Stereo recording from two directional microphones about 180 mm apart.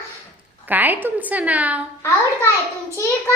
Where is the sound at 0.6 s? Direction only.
10° right (ahead or behind).